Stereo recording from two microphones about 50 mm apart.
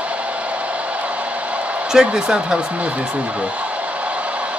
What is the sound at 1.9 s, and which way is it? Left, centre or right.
Speech, centre.